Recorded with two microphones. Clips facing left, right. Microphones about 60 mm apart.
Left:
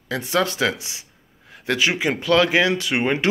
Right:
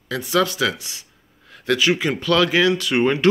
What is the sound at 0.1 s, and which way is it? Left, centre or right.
Speech, left.